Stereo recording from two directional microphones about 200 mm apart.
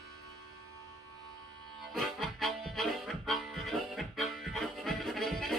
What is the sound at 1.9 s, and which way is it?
Harmonica, centre (ahead or behind).